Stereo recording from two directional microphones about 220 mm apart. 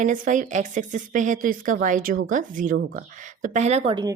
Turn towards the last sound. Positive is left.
turn(degrees=-20)  # may be behind; listen again after turning